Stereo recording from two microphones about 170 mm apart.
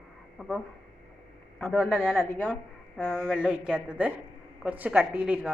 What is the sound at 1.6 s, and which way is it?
A woman's voice, 5° left (ahead or behind).